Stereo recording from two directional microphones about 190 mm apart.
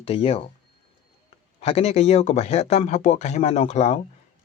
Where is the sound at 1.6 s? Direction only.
35° left (ahead or behind).